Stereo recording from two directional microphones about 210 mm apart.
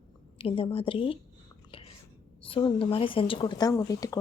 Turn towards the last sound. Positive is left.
turn(degrees=15)  # may be behind; listen again after turning